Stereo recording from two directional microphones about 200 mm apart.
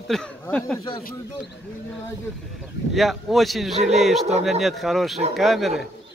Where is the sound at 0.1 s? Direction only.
5° left (ahead or behind).